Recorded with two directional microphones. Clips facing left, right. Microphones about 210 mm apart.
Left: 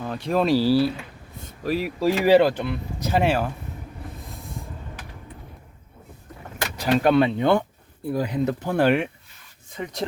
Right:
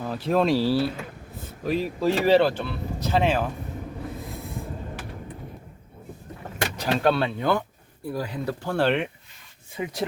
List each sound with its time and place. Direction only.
0.0 s speech: 5° right (ahead or behind)
6.7 s speech: 10° left (ahead or behind)
9.7 s speech: 5° right (ahead or behind)